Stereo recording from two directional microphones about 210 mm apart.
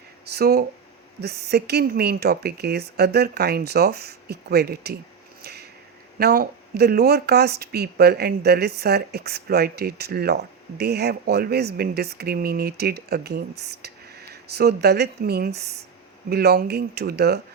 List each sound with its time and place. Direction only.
0.3 s speech: 50° right (ahead or behind)
5.4 s a sound: 50° right (ahead or behind)
6.1 s speech: 45° right (ahead or behind)